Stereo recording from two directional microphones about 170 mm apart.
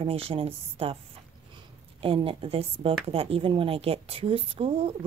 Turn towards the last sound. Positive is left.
turn(degrees=-35)  # may be behind; listen again after turning